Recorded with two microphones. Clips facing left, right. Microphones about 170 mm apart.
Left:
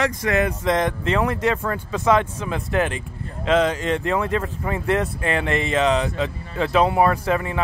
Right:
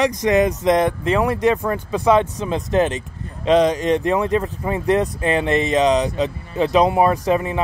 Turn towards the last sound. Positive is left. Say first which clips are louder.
# right 3 dB
turn(degrees=-20)  # may be behind; listen again after turning